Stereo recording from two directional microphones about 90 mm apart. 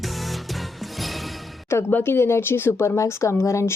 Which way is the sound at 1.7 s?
25° left (ahead or behind).